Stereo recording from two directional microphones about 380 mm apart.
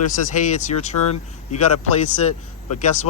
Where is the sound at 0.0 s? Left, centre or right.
Centre.